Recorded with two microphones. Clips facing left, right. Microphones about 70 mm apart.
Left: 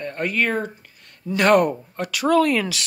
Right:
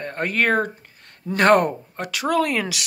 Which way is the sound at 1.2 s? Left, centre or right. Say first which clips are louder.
Even; right.